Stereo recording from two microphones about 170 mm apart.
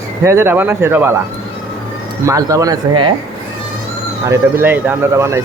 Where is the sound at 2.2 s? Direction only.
20° right (ahead or behind).